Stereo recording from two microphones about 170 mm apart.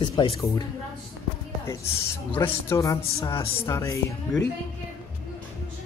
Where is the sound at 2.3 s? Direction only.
15° left (ahead or behind).